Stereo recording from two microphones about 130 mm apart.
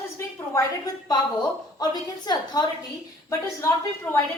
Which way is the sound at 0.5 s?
30° left (ahead or behind).